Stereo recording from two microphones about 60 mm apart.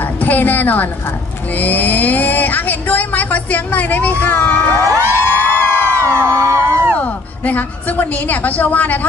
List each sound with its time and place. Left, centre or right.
0.2 s a woman's voice: left
4.9 s music: left
6.2 s a sound: right
7.4 s speech: left